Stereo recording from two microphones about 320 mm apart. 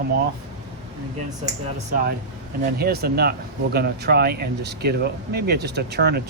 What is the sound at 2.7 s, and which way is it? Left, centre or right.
Speech, right.